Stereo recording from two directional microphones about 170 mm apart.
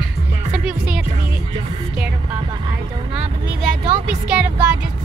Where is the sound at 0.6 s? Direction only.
5° right (ahead or behind).